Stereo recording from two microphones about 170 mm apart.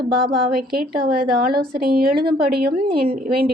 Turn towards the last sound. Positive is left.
turn(degrees=-65)  # may be behind; listen again after turning